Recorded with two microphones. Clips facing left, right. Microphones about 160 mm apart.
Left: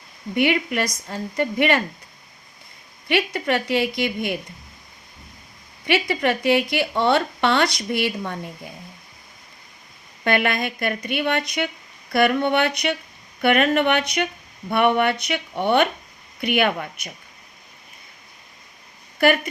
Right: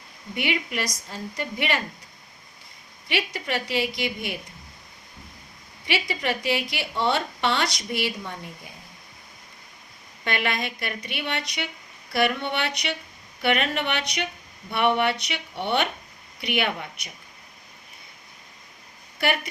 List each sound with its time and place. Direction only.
0.3 s a woman's voice: 55° left (ahead or behind)
3.1 s a woman's voice: 55° left (ahead or behind)
5.8 s a woman's voice: 55° left (ahead or behind)
10.2 s a woman's voice: 50° left (ahead or behind)